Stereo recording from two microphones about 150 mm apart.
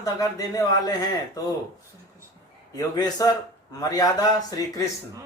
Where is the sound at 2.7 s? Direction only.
25° left (ahead or behind).